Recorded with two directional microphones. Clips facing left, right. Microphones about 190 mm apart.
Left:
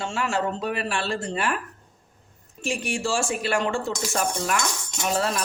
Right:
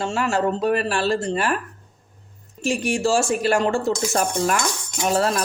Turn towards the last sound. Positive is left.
turn(degrees=-40)  # may be behind; listen again after turning